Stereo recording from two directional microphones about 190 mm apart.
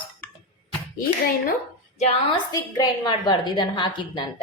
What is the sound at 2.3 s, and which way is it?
A woman's voice, 20° left (ahead or behind).